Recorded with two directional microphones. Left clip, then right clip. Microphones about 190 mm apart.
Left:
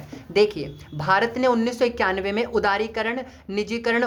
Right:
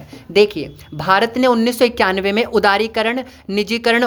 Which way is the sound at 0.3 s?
30° right (ahead or behind).